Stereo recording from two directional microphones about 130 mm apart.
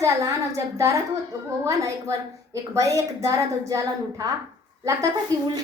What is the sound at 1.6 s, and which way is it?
A woman's voice, 25° right (ahead or behind).